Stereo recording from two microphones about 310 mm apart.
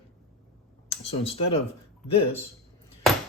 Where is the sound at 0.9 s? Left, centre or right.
Centre.